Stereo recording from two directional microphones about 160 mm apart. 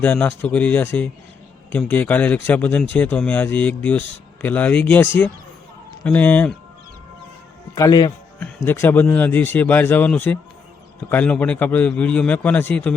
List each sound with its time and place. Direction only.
0.0 s speech: 10° left (ahead or behind)
7.8 s a man's voice: 25° left (ahead or behind)
8.4 s speech: 15° left (ahead or behind)